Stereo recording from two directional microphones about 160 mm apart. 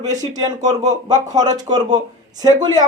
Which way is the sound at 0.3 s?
25° right (ahead or behind).